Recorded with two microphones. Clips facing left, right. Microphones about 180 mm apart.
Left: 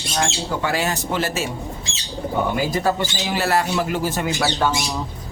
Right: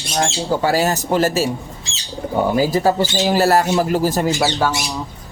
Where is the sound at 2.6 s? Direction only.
35° right (ahead or behind).